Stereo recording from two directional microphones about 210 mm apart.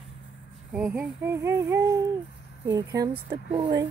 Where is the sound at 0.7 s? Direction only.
5° right (ahead or behind); by 3.9 s 20° right (ahead or behind).